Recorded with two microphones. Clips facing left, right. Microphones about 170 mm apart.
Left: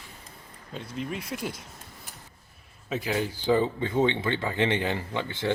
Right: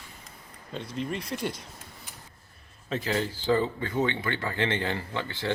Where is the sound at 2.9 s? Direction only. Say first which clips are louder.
Even; 10° left (ahead or behind).